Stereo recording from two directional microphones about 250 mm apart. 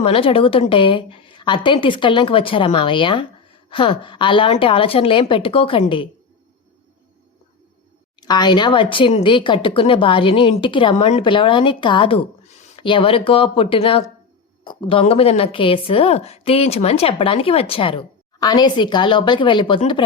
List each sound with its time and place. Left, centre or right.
0.0 s speech: left
8.2 s speech: centre